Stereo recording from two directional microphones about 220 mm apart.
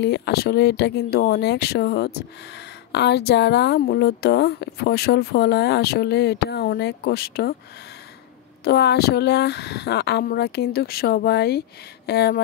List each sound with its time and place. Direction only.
0.0 s speech: 50° left (ahead or behind)
8.6 s speech: 50° left (ahead or behind)